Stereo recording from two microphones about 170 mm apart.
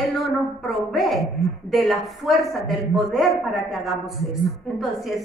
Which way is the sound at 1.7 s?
Centre (ahead or behind).